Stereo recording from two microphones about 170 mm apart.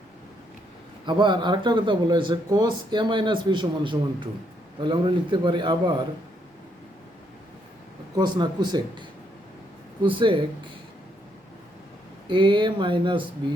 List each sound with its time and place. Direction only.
1.0 s speech: 25° right (ahead or behind)
8.1 s speech: 25° right (ahead or behind)
12.3 s speech: 30° right (ahead or behind)